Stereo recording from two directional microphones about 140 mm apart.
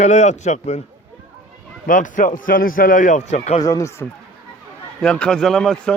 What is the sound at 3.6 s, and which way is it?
Speech, 25° left (ahead or behind).